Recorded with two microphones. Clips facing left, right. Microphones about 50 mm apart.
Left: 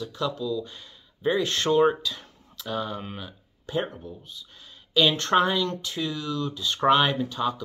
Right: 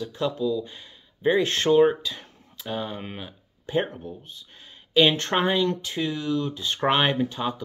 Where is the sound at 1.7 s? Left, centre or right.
Centre.